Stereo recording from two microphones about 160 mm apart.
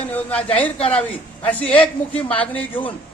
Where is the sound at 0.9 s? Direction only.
10° left (ahead or behind).